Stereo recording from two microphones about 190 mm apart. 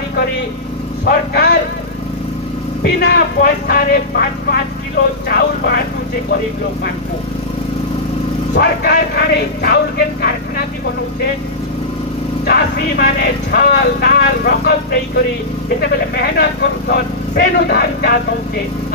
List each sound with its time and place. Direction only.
1.0 s speech: 55° left (ahead or behind)
3.0 s speech: 60° left (ahead or behind)
8.5 s speech: 60° left (ahead or behind)
12.4 s speech: 60° left (ahead or behind)
16.2 s speech: 60° left (ahead or behind)